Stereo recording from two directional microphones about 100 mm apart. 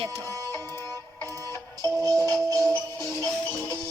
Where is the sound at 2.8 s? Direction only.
25° left (ahead or behind).